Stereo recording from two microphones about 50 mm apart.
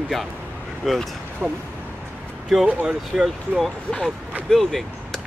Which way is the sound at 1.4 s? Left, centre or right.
Right.